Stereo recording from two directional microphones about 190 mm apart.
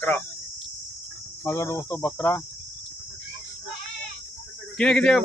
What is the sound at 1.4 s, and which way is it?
Speech, 15° left (ahead or behind).